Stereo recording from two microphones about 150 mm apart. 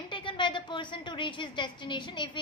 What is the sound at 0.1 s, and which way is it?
A woman's voice, 30° left (ahead or behind).